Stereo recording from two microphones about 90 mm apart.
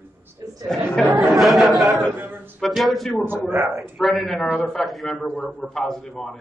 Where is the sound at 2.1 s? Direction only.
25° right (ahead or behind).